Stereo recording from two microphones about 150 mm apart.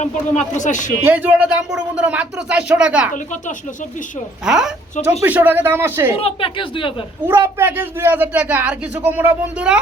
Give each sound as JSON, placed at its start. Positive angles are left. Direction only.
{"t": 0.0, "sound": "speech", "side_deg": 55}
{"t": 1.0, "sound": "a man's voice", "side_deg": -10}
{"t": 4.4, "sound": "a woman's voice", "side_deg": -5}
{"t": 6.1, "sound": "speech", "side_deg": 40}
{"t": 7.3, "sound": "a man's voice", "side_deg": -15}